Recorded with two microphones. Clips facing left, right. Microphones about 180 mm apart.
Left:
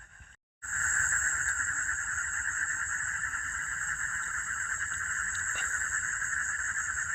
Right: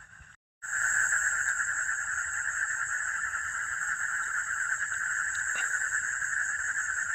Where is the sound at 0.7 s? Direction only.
65° right (ahead or behind).